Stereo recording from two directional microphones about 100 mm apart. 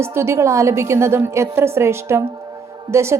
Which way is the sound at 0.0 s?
25° right (ahead or behind).